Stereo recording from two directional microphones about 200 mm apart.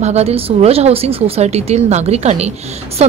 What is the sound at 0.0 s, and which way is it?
Speech, 30° right (ahead or behind).